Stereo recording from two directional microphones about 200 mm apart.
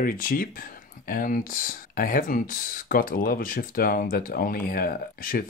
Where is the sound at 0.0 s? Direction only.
45° left (ahead or behind).